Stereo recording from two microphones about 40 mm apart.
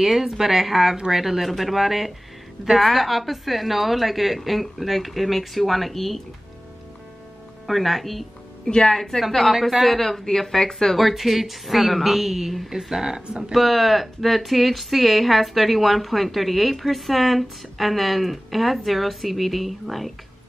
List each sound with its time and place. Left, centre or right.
0.0 s a woman's voice: centre
7.6 s a woman's voice: centre
8.6 s speech: centre
8.9 s speech: centre
9.5 s a woman's voice: centre
9.8 s speech: centre
11.0 s a woman's voice: centre